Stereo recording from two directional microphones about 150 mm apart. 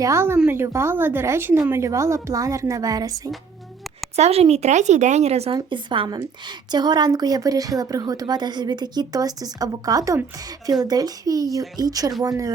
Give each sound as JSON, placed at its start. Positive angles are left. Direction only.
{"t": 0.0, "sound": "a woman's voice", "side_deg": -15}
{"t": 4.1, "sound": "speech", "side_deg": -45}
{"t": 5.5, "sound": "speech", "side_deg": -35}